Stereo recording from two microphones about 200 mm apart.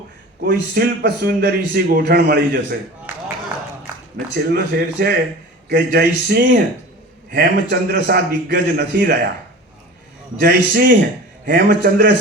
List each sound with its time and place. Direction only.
0.4 s a man's voice: 50° right (ahead or behind)
4.4 s a man's voice: 50° right (ahead or behind)
10.4 s a man's voice: 50° right (ahead or behind)